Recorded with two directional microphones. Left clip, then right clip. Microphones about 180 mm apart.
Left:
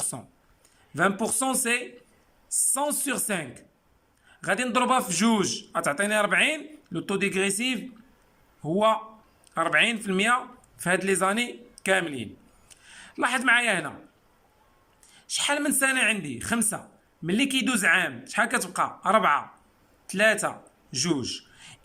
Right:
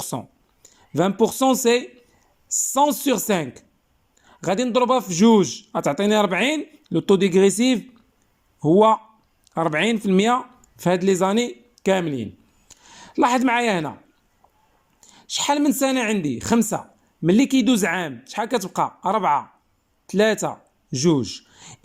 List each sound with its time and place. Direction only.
0.0 s a man's voice: 20° right (ahead or behind)
15.0 s a man's voice: 25° right (ahead or behind)